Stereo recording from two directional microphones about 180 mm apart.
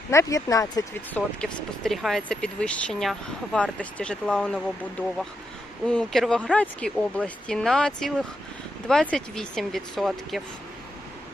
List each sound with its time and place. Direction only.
0.1 s speech: 15° left (ahead or behind)
1.4 s speech: centre (ahead or behind)